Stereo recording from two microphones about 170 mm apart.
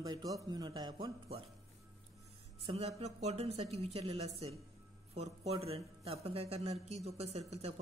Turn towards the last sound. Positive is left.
turn(degrees=-40)  # may be behind; listen again after turning